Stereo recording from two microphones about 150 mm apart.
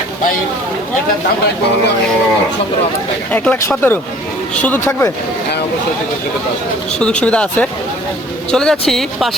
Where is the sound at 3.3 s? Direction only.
10° left (ahead or behind).